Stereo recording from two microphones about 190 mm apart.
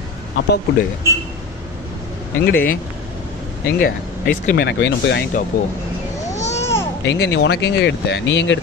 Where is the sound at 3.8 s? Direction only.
45° left (ahead or behind).